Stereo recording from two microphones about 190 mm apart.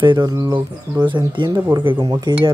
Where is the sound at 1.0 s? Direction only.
25° right (ahead or behind).